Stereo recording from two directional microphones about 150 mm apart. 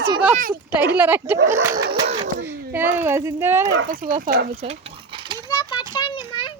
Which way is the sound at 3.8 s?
70° right (ahead or behind).